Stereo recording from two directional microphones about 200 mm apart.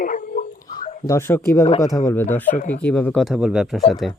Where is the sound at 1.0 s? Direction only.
15° left (ahead or behind).